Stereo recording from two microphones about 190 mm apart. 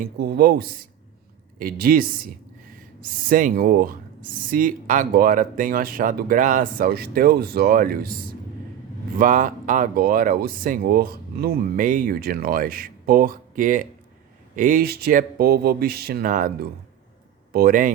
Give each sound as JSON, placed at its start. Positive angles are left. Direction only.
{"t": 0.0, "sound": "speech", "side_deg": -55}